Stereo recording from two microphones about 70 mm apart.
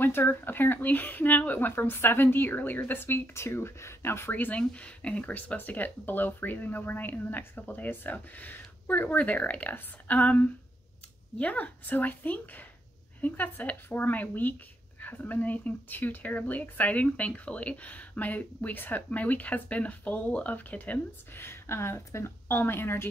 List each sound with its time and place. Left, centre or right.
0.0 s speech: left
4.3 s speech: left
21.5 s speech: left